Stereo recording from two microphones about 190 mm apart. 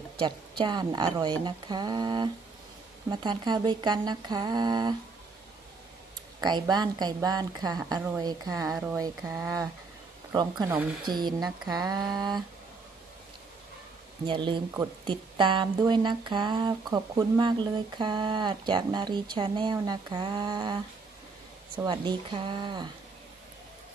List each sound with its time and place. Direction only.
0.2 s speech: 25° right (ahead or behind)
6.4 s speech: 20° right (ahead or behind)
11.1 s speech: 20° right (ahead or behind)
14.2 s speech: 25° right (ahead or behind)